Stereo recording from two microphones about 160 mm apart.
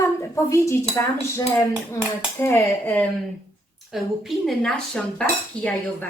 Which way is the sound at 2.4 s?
15° left (ahead or behind).